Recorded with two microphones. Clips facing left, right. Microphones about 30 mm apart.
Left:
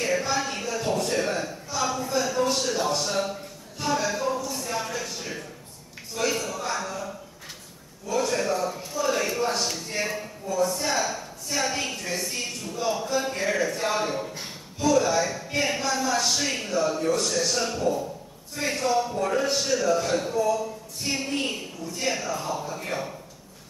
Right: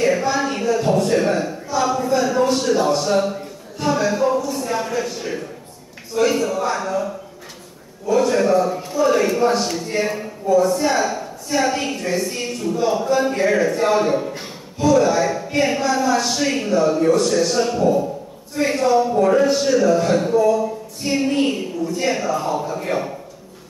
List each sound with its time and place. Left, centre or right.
0.0 s a sound: centre
2.4 s speech: centre
8.1 s speech: centre
21.0 s speech: centre